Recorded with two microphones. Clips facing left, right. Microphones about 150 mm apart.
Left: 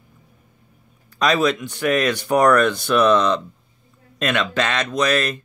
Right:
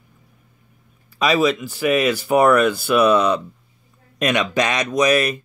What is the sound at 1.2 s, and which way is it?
Speech, 5° right (ahead or behind).